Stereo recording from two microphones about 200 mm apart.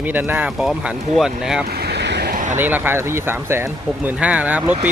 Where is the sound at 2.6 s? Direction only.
10° right (ahead or behind).